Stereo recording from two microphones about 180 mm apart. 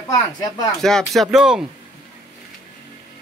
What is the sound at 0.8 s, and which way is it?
Speech, 5° left (ahead or behind).